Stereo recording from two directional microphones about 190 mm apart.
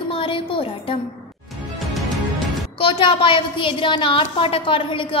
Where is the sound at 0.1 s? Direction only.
25° left (ahead or behind).